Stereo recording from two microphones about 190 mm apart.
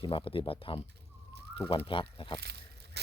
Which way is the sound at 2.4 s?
60° right (ahead or behind).